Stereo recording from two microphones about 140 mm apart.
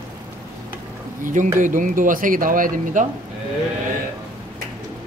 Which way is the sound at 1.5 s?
65° right (ahead or behind).